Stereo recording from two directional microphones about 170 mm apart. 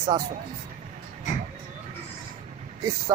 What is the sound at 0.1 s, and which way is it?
Speech, 25° right (ahead or behind).